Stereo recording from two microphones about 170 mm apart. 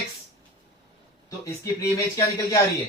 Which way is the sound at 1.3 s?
20° left (ahead or behind).